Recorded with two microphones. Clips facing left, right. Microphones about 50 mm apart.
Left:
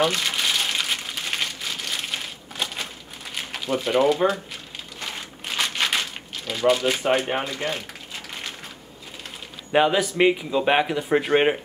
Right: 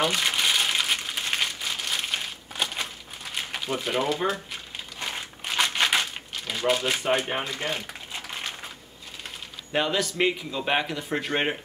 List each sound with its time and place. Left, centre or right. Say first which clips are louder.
0.0 s crumpling: left 2 dB; centre
6.7 s speech: left 3 dB; centre
9.7 s a man's voice: left 6 dB; centre